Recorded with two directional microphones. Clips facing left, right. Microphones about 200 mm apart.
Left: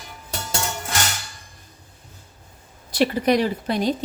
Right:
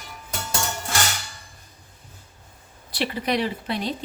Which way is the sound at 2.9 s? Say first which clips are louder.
Left 6 dB; 45° left (ahead or behind).